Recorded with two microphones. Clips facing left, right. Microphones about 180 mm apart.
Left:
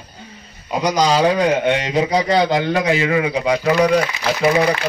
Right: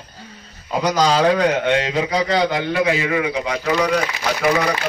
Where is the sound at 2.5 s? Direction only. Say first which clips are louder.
Left 2 dB; 35° left (ahead or behind).